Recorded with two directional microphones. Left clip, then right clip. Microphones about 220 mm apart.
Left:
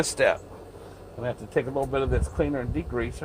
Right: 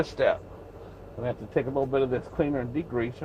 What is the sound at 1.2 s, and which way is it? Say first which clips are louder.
Speech: left 1 dB; 10° left (ahead or behind).